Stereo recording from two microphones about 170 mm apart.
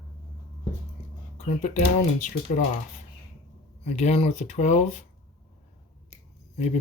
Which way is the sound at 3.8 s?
40° left (ahead or behind).